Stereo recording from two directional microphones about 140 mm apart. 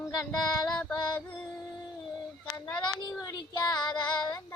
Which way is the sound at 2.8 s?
35° left (ahead or behind).